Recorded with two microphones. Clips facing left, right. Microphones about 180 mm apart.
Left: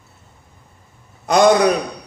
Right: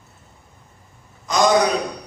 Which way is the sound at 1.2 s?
60° left (ahead or behind).